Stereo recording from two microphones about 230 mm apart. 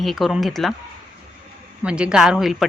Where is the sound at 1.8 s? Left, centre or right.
Centre.